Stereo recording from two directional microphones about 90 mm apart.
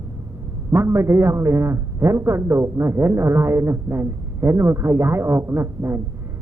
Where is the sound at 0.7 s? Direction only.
25° right (ahead or behind).